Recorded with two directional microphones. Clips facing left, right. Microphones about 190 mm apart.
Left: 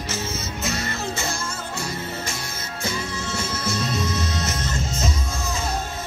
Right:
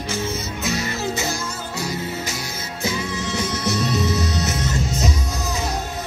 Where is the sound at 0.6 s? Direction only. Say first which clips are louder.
Right 4 dB; centre (ahead or behind).